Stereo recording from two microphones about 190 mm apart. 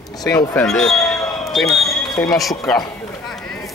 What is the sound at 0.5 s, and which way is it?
Speech, 5° left (ahead or behind).